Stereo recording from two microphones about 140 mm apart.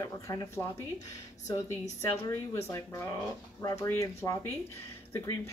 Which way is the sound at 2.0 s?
20° left (ahead or behind).